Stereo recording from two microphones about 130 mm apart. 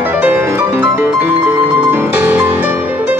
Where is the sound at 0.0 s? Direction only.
15° right (ahead or behind).